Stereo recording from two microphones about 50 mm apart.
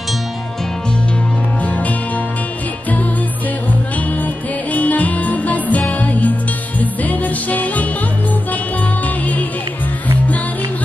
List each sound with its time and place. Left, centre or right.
1.6 s music: left
4.7 s music: left